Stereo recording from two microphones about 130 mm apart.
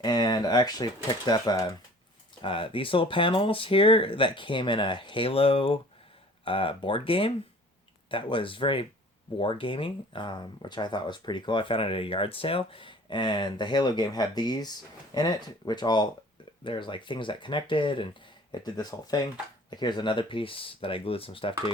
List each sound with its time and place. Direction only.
0.0 s speech: 30° left (ahead or behind)
2.4 s speech: 40° left (ahead or behind)